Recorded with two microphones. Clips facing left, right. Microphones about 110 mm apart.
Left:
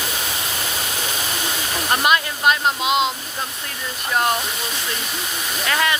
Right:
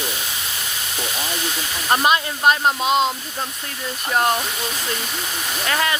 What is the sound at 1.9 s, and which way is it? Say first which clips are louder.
Speech: right 1 dB; 30° right (ahead or behind).